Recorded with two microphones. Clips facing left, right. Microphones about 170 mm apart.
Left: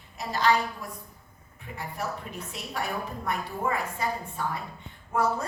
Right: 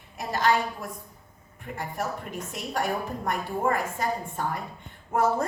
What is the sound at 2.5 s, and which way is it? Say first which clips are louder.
A woman's voice: right 5 dB; 45° right (ahead or behind).